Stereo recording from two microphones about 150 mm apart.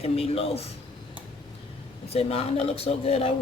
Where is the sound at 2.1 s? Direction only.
40° left (ahead or behind).